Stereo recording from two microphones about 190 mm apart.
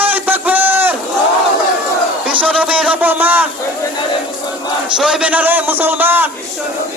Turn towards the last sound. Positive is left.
turn(degrees=-10)  # may be behind; listen again after turning